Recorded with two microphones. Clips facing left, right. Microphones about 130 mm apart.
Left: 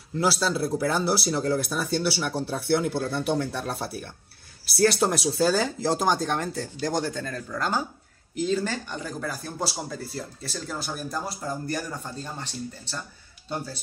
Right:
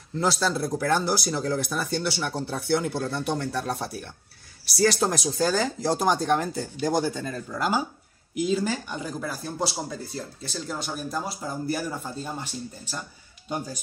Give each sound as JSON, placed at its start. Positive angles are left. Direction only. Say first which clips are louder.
{"t": 0.1, "sound": "speech", "louder": "even", "side_deg": 5}